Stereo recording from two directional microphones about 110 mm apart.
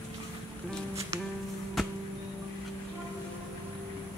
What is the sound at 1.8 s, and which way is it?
Music, centre (ahead or behind).